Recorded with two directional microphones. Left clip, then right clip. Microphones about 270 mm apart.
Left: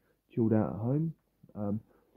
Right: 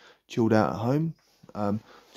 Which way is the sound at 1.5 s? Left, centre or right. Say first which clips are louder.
Right 8 dB; right.